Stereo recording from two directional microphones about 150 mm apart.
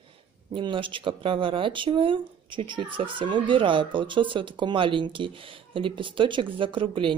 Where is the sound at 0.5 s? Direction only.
35° right (ahead or behind).